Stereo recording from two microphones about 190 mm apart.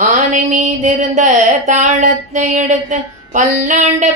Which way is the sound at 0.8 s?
40° right (ahead or behind).